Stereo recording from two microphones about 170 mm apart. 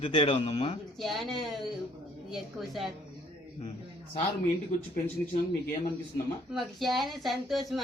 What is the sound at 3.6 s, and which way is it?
Speech, 35° left (ahead or behind).